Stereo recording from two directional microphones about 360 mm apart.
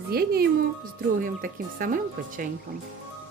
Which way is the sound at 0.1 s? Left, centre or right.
Right.